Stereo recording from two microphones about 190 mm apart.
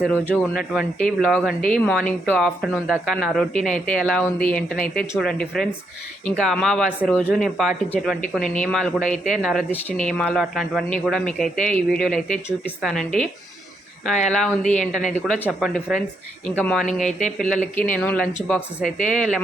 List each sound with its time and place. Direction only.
0.3 s speech: 5° right (ahead or behind)
14.8 s speech: 40° left (ahead or behind)
15.2 s speech: 5° right (ahead or behind)
16.8 s speech: 40° left (ahead or behind)
17.4 s speech: 5° left (ahead or behind)